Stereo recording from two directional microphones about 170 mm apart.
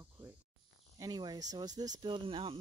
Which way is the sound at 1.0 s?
25° right (ahead or behind).